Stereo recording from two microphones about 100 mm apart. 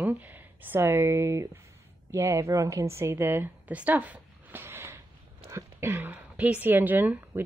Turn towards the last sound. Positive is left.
turn(degrees=-20)  # may be behind; listen again after turning